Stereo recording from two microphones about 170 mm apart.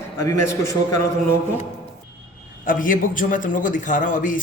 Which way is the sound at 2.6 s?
55° left (ahead or behind).